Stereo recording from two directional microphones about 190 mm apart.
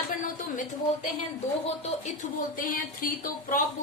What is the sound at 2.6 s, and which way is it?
Speech, 45° left (ahead or behind).